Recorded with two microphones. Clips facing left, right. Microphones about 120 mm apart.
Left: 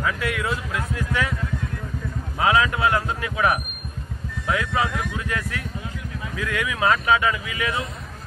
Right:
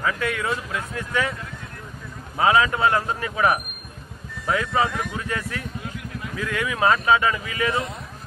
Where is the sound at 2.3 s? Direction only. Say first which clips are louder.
Right 1 dB; 25° right (ahead or behind).